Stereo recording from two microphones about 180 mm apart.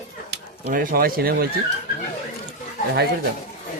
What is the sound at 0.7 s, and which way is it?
Speech, 50° right (ahead or behind).